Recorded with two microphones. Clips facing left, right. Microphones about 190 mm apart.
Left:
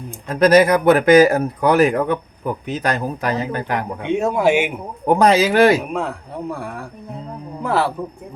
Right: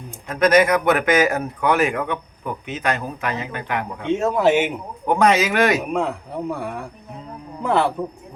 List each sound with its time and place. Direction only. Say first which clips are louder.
0.3 s speech: left 3 dB; 30° left (ahead or behind)
4.0 s speech: even; 15° left (ahead or behind)
5.0 s speech: left 3 dB; 35° left (ahead or behind)
5.9 s speech: right 1 dB; centre (ahead or behind)